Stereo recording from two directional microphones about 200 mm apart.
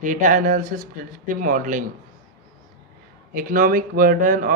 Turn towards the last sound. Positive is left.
turn(degrees=-40)  # may be behind; listen again after turning